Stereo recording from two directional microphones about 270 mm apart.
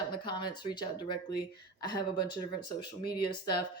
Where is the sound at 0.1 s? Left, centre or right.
Centre.